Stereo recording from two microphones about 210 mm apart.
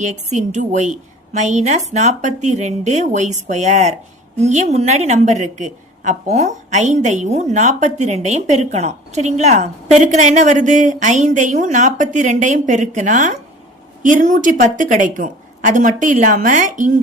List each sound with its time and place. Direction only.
0.0 s a woman's voice: 35° right (ahead or behind)